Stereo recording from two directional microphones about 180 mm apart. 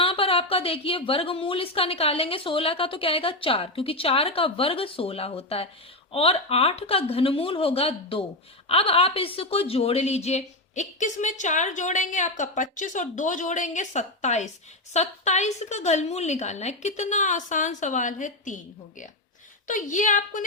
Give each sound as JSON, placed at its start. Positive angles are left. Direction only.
{"t": 0.0, "sound": "a woman's voice", "side_deg": 30}